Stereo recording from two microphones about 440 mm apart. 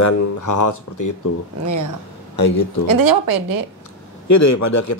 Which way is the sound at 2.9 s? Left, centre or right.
Right.